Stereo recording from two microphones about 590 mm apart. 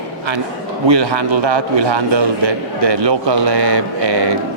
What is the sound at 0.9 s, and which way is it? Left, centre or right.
A man's voice, right.